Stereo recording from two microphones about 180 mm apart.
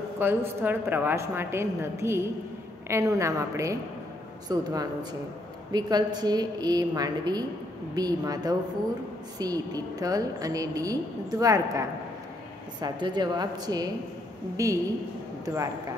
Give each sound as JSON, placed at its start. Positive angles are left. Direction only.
{"t": 0.2, "sound": "a woman's voice", "side_deg": -10}
{"t": 12.8, "sound": "a woman's voice", "side_deg": -25}